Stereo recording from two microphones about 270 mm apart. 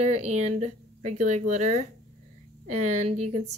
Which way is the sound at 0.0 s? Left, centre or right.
Right.